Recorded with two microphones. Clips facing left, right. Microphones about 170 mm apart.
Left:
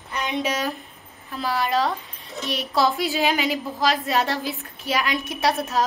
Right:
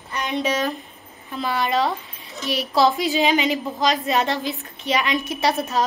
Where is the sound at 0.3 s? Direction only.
10° left (ahead or behind).